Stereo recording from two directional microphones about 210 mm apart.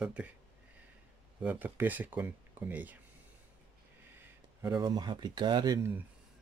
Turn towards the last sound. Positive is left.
turn(degrees=-10)  # may be behind; listen again after turning